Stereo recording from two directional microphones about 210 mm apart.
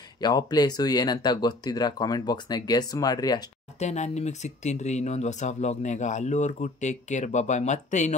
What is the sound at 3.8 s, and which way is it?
Speech, 30° left (ahead or behind).